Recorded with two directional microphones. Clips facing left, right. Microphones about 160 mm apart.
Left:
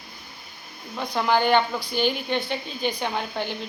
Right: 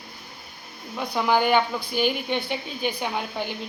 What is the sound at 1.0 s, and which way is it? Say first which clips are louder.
A woman's voice: even; 10° right (ahead or behind).